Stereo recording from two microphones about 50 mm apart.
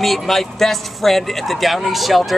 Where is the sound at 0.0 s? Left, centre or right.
Centre.